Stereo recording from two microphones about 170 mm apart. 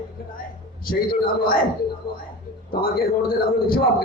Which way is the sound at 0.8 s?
60° left (ahead or behind).